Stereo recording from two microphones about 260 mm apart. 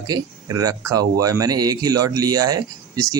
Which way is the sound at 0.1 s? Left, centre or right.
Centre.